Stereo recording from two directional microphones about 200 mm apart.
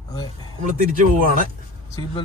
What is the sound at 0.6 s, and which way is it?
Speech, 40° right (ahead or behind).